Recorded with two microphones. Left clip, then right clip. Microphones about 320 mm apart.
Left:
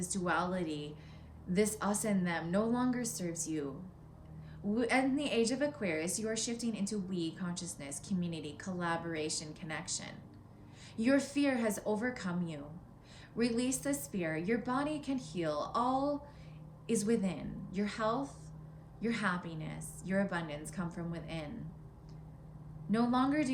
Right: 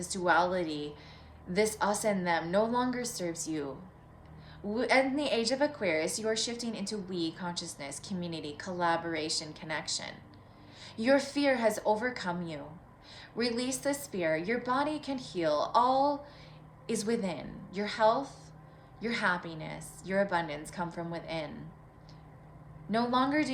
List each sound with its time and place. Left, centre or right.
0.0 s a woman's voice: centre
4.7 s a woman's voice: centre
22.9 s a woman's voice: centre